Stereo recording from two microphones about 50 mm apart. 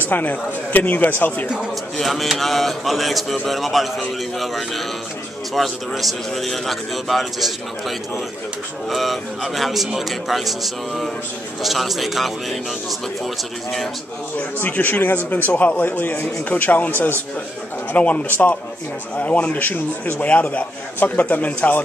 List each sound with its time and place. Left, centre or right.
0.1 s speech: left
2.0 s speech: centre
8.8 s speech: centre
14.3 s speech: left
17.9 s speech: left